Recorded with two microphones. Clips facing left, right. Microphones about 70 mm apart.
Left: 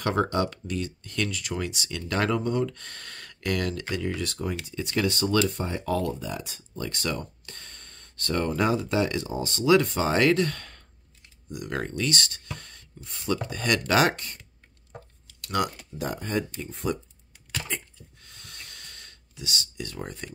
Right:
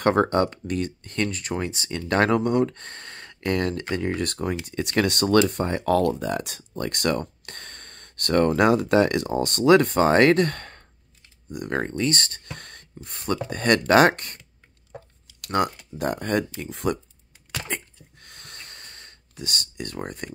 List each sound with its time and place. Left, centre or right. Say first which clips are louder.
0.0 s speech: right 5 dB; right
2.7 s speech: right 3 dB; right
15.5 s speech: right 4 dB; right
17.6 s a sound: right 3 dB; right